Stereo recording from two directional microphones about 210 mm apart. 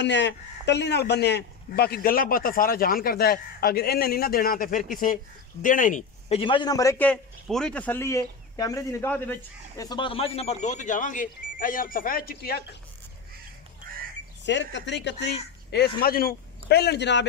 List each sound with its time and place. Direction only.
0.0 s a man's voice: 55° left (ahead or behind)
14.4 s a man's voice: 55° left (ahead or behind)